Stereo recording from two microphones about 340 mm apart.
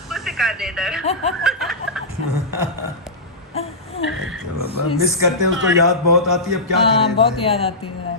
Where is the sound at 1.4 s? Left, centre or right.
Centre.